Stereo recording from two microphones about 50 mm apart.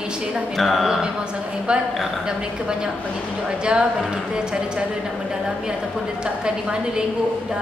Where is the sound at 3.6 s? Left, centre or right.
Centre.